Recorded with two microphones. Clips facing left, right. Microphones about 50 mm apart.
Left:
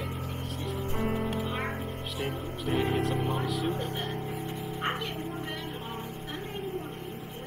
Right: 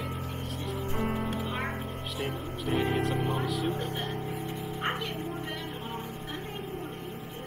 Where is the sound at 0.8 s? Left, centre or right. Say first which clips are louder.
Right 1 dB; right.